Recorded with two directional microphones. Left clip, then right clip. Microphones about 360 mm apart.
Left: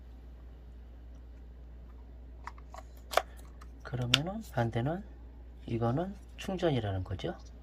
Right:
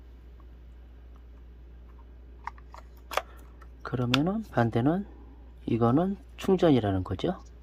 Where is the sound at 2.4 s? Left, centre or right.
Centre.